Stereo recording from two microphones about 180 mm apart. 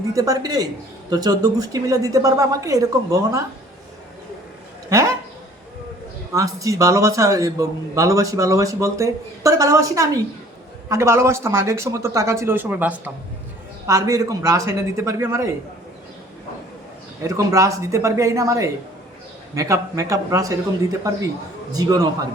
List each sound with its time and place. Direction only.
0.1 s a woman's voice: 20° right (ahead or behind)
6.3 s a man's voice: 20° right (ahead or behind)
17.2 s a man's voice: 15° right (ahead or behind)
21.7 s a woman's voice: 20° right (ahead or behind)